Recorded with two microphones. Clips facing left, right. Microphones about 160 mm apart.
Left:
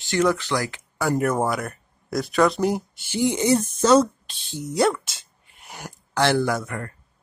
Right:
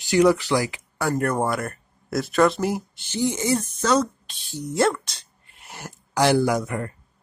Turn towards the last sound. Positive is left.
turn(degrees=-20)  # may be behind; listen again after turning